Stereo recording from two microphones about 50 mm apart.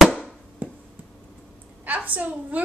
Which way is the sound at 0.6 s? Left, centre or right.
Right.